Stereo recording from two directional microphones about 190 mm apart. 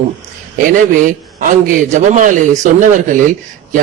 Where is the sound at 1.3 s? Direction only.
45° right (ahead or behind).